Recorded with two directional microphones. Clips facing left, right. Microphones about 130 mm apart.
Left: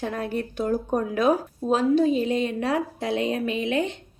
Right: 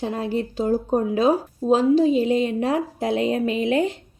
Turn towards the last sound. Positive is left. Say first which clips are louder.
# right 4 dB
turn(degrees=-35)  # may be behind; listen again after turning